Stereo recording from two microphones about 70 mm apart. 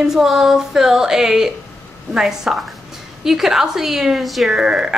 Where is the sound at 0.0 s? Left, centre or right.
Centre.